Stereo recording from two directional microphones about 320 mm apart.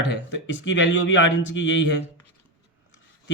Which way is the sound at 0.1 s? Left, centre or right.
Left.